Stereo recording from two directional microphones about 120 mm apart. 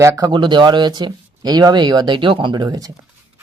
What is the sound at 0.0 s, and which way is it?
Speech, 30° right (ahead or behind).